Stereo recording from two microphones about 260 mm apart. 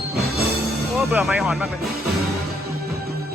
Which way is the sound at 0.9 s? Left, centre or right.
Centre.